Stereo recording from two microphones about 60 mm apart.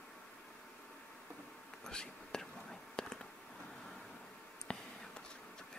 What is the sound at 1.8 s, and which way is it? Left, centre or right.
Whispering, centre.